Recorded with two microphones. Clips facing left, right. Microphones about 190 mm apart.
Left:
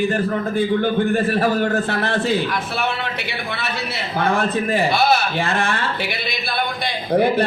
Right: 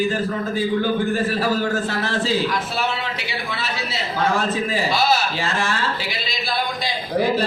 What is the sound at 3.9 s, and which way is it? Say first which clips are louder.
A man's voice: left 1 dB; 60° left (ahead or behind).